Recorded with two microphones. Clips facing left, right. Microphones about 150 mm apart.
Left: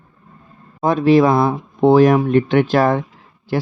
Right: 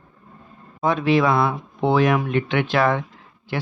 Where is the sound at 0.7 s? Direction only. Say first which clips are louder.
Left 6 dB; 40° left (ahead or behind).